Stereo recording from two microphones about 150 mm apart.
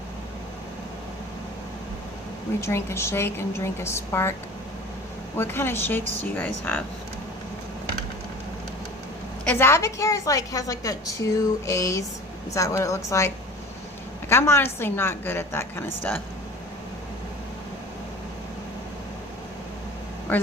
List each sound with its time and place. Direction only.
2.6 s a woman's voice: 15° left (ahead or behind)
5.4 s a woman's voice: 15° left (ahead or behind)
9.4 s a woman's voice: 10° left (ahead or behind)